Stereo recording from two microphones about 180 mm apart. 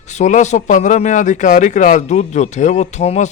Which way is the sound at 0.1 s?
40° left (ahead or behind).